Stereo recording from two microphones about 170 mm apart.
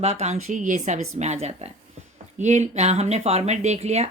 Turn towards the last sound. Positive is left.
turn(degrees=-40)  # may be behind; listen again after turning